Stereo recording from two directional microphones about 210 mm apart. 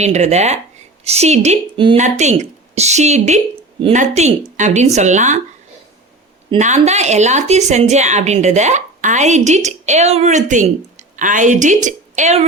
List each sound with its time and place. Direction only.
0.0 s speech: 30° right (ahead or behind)
6.6 s speech: 35° right (ahead or behind)